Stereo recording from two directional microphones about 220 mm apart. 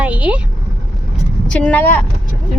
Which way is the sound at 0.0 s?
5° right (ahead or behind).